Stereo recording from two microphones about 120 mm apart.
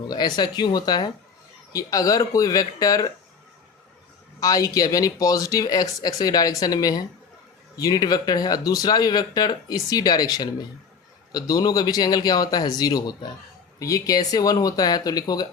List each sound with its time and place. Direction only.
0.1 s speech: 35° left (ahead or behind)
4.4 s speech: 30° left (ahead or behind)